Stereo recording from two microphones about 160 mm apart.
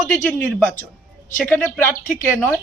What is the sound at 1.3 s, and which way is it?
Speech, 10° left (ahead or behind).